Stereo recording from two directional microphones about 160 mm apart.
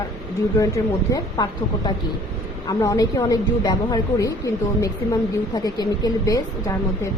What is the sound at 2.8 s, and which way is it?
A woman's voice, 20° left (ahead or behind).